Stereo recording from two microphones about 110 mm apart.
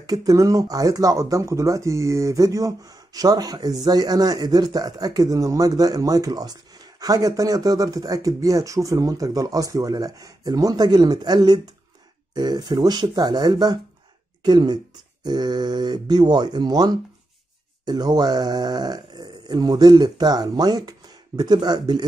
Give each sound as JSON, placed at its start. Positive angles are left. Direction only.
{"t": 0.0, "sound": "speech", "side_deg": -35}